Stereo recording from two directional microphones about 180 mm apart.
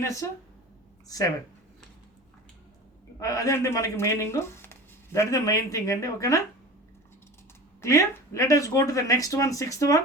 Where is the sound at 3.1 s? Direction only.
20° left (ahead or behind).